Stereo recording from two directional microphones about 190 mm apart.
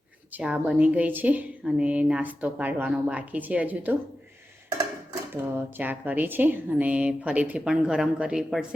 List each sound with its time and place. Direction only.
0.3 s a woman's voice: 10° right (ahead or behind)
5.3 s a woman's voice: 10° right (ahead or behind)